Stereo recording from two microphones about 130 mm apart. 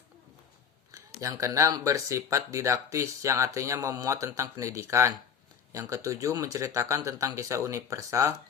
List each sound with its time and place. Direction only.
0.9 s speech: 25° right (ahead or behind)